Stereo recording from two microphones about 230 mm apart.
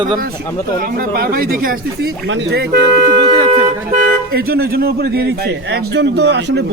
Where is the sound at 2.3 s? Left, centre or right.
Right.